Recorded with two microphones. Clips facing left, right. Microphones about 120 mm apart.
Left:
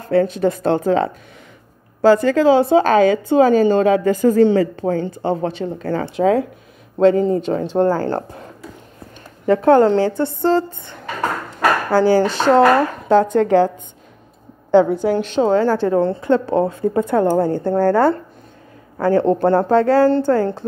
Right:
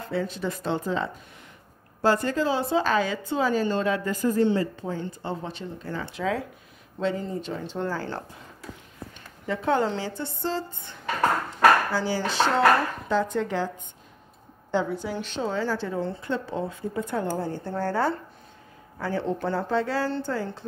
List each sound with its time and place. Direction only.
0.0 s a woman's voice: 65° left (ahead or behind)
2.0 s speech: 90° left; by 6.4 s 55° left (ahead or behind)
7.0 s a woman's voice: 70° left (ahead or behind)
9.5 s a woman's voice: 55° left (ahead or behind)
14.7 s a woman's voice: 65° left (ahead or behind)